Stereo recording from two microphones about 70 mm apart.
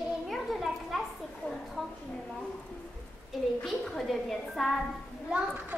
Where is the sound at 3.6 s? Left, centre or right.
Centre.